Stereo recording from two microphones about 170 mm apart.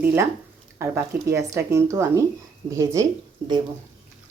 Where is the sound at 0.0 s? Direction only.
10° right (ahead or behind).